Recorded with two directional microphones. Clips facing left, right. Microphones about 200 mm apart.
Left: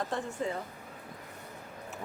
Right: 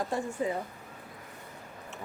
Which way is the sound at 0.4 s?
10° right (ahead or behind).